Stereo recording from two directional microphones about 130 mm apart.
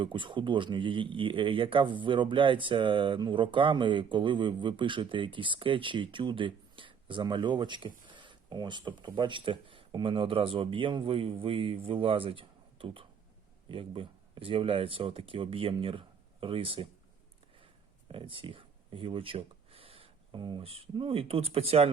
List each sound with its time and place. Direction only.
0.0 s speech: 40° right (ahead or behind)
18.1 s a sound: 40° right (ahead or behind)
20.7 s speech: 45° right (ahead or behind)